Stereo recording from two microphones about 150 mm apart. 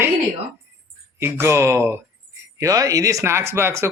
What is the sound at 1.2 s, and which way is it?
Speech, 15° right (ahead or behind).